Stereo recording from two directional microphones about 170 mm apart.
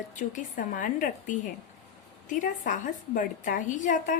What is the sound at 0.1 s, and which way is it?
A woman's voice, 50° left (ahead or behind).